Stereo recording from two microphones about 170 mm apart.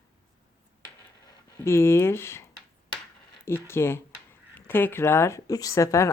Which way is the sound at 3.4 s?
15° left (ahead or behind).